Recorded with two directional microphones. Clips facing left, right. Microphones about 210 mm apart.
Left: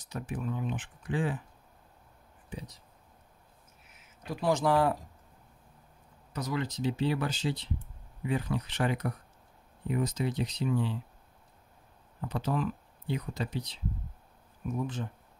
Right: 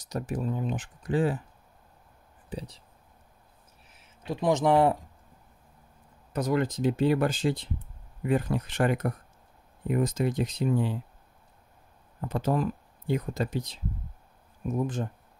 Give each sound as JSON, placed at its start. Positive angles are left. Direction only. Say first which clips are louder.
{"t": 0.0, "sound": "speech", "louder": "right 5 dB", "side_deg": -40}
{"t": 2.5, "sound": "speech", "louder": "right 5 dB", "side_deg": -30}
{"t": 4.2, "sound": "speech", "louder": "right 3 dB", "side_deg": -20}
{"t": 6.3, "sound": "speech", "louder": "right 7 dB", "side_deg": -50}
{"t": 12.2, "sound": "speech", "louder": "right 4 dB", "side_deg": -50}